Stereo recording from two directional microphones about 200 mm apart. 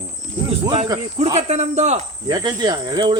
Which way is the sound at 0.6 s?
25° right (ahead or behind).